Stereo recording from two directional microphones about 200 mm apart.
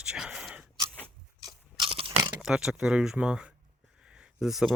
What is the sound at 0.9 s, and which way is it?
Crunch, 5° left (ahead or behind).